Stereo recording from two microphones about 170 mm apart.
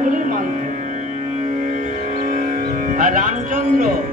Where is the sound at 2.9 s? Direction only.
50° right (ahead or behind).